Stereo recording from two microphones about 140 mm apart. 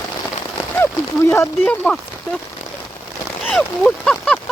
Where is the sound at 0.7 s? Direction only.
15° left (ahead or behind).